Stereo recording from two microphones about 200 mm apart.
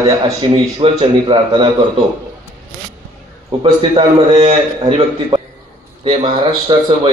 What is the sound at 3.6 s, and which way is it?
A man's voice, 25° right (ahead or behind).